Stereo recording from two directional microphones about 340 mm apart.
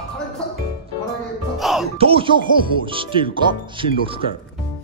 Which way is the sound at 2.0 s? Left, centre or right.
Centre.